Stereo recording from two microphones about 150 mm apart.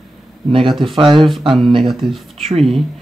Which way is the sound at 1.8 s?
Centre (ahead or behind).